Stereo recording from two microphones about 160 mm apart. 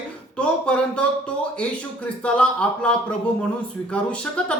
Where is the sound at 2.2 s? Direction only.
5° left (ahead or behind).